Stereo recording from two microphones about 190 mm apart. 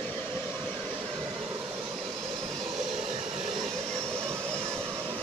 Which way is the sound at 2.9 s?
35° right (ahead or behind).